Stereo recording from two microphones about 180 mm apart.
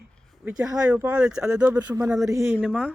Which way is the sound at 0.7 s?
5° right (ahead or behind).